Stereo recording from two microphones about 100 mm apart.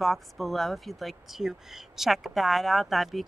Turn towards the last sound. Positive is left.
turn(degrees=0)  # may be behind; listen again after turning